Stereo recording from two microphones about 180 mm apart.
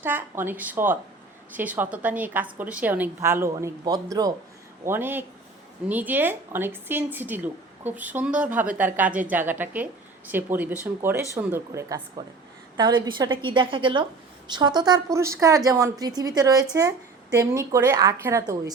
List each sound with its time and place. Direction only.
0.0 s a woman's voice: 10° right (ahead or behind)